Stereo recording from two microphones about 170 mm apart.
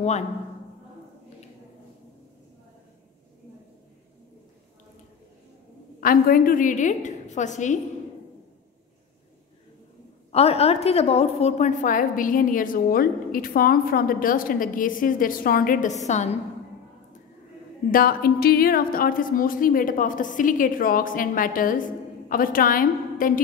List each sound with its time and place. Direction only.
5.9 s a woman's voice: 55° left (ahead or behind)
10.3 s a woman's voice: 35° left (ahead or behind)
17.9 s a woman's voice: 60° left (ahead or behind)